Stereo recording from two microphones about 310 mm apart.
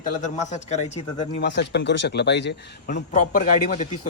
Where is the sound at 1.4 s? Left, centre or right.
Left.